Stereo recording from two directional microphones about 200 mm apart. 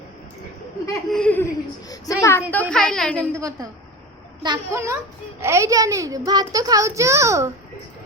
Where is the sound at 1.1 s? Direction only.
5° left (ahead or behind).